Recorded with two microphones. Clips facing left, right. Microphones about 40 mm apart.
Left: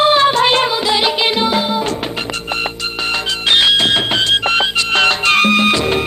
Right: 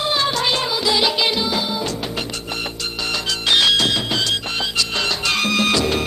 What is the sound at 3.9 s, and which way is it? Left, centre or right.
Music, left.